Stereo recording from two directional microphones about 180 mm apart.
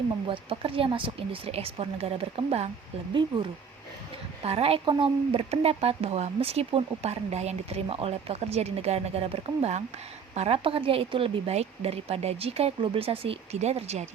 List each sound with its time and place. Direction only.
0.3 s speech: 30° right (ahead or behind)
4.4 s speech: 35° right (ahead or behind)